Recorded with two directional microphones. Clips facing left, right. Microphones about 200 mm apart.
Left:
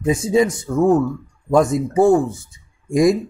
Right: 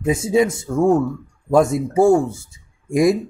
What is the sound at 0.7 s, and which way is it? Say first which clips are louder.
Speech: left 1 dB; centre (ahead or behind).